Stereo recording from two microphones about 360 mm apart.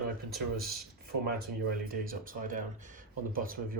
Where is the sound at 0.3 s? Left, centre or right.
Right.